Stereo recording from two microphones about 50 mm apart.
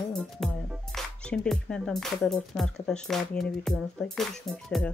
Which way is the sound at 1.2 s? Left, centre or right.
Centre.